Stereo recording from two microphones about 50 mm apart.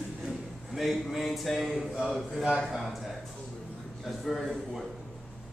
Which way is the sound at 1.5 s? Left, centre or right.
Centre.